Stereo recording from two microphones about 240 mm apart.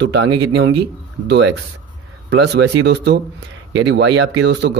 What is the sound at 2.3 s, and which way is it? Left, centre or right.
Speech, right.